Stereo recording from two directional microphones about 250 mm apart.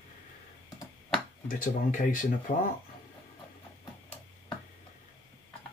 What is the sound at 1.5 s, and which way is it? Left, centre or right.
Speech, left.